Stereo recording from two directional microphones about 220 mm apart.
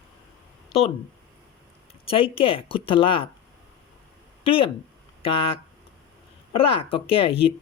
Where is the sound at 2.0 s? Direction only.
25° left (ahead or behind).